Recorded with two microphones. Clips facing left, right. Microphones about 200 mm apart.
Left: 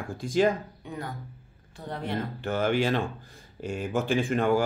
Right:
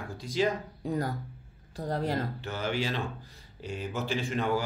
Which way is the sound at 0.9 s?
35° right (ahead or behind).